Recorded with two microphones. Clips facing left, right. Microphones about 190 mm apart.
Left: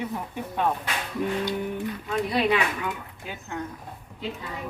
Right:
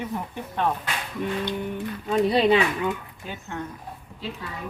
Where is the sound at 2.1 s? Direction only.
30° right (ahead or behind).